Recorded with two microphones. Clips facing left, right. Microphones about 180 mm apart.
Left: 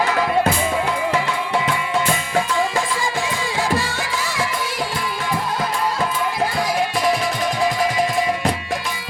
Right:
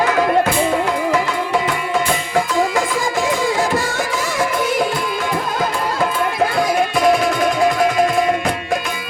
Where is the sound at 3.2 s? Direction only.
45° right (ahead or behind).